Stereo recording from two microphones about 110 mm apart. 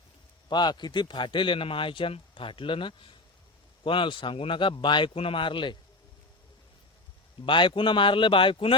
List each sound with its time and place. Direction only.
0.4 s a man's voice: 40° left (ahead or behind)
7.4 s a man's voice: 45° left (ahead or behind)